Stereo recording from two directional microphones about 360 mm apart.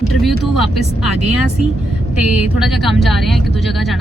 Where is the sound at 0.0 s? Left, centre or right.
Centre.